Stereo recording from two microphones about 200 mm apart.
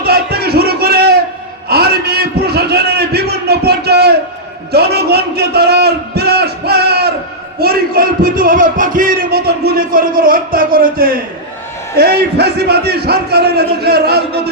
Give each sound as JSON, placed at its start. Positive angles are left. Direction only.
{"t": 0.0, "sound": "music", "side_deg": -50}
{"t": 1.6, "sound": "a sound", "side_deg": -50}
{"t": 7.6, "sound": "music", "side_deg": -50}